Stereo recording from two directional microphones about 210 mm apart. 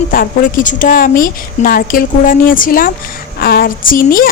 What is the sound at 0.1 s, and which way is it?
A woman's voice, 40° left (ahead or behind).